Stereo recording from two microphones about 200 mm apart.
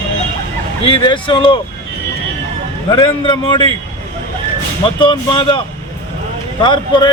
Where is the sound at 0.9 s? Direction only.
25° left (ahead or behind).